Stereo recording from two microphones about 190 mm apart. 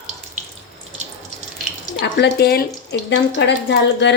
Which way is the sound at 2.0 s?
65° left (ahead or behind).